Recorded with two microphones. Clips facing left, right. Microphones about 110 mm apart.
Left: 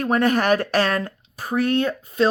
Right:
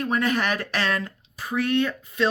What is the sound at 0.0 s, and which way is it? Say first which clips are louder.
Speech: left 5 dB; 50° left (ahead or behind).